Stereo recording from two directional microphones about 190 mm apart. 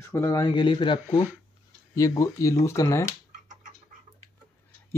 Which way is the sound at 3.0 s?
40° right (ahead or behind).